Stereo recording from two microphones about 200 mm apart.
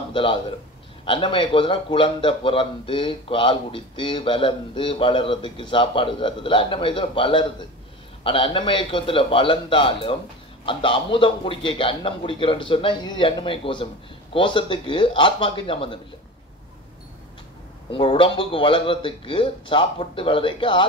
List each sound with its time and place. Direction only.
0.1 s a man's voice: 25° left (ahead or behind)
17.9 s a man's voice: 25° left (ahead or behind)